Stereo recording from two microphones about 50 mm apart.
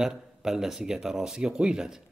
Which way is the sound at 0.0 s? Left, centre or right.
Centre.